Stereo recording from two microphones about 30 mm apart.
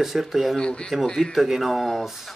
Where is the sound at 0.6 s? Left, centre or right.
Left.